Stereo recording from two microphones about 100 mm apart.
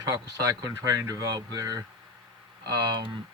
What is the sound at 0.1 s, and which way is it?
Speech, 35° right (ahead or behind).